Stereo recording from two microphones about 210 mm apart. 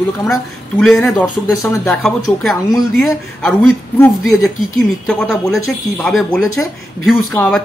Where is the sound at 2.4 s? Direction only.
Centre (ahead or behind).